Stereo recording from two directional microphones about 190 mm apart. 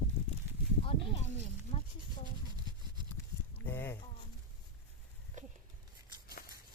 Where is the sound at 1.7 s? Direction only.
30° left (ahead or behind).